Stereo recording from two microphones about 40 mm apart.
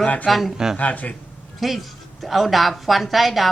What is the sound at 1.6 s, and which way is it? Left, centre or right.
A woman's voice, centre.